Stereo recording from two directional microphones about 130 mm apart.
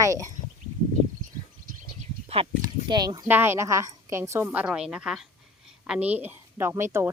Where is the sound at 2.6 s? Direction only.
30° right (ahead or behind).